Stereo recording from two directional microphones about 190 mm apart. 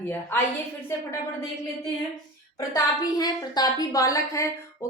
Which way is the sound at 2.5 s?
20° left (ahead or behind).